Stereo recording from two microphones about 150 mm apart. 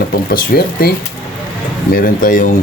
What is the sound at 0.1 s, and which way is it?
Speech, 90° left.